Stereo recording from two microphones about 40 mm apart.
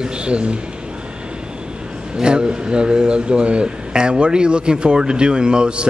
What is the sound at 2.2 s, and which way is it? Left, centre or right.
Speech, right.